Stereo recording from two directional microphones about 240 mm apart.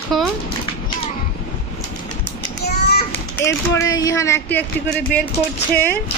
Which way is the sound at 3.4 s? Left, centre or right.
Centre.